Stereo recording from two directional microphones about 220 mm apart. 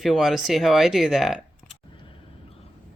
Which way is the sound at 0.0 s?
Centre (ahead or behind).